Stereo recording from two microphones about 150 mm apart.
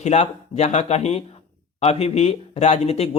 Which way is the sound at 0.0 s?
50° left (ahead or behind).